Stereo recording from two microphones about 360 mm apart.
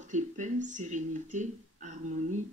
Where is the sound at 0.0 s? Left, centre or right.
Centre.